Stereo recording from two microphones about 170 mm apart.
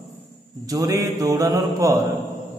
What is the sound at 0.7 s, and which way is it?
A man's voice, 20° right (ahead or behind).